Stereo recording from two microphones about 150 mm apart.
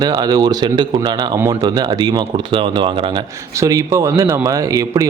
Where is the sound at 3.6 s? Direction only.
20° right (ahead or behind).